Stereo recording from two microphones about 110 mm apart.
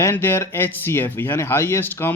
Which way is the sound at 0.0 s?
20° left (ahead or behind).